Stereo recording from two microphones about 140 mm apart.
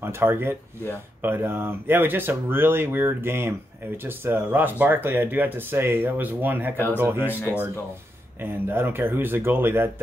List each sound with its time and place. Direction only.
0.0 s speech: 15° right (ahead or behind)
8.4 s speech: 15° right (ahead or behind)